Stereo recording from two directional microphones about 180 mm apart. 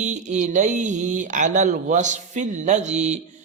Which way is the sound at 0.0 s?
40° right (ahead or behind).